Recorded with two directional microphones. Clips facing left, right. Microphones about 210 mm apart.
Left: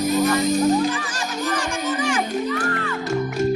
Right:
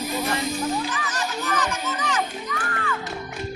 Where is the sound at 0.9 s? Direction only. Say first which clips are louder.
Left 2 dB; 30° left (ahead or behind).